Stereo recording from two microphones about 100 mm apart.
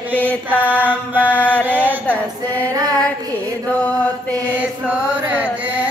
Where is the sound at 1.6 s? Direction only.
15° right (ahead or behind).